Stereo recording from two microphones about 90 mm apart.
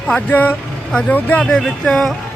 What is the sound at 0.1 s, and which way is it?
Music, 20° left (ahead or behind).